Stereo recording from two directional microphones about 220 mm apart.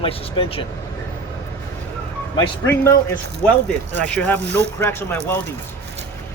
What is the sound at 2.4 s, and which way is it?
Speech, 15° left (ahead or behind).